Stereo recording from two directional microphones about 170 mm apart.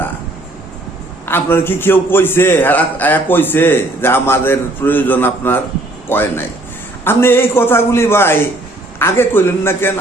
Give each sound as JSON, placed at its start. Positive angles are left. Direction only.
{"t": 1.2, "sound": "a man's voice", "side_deg": 15}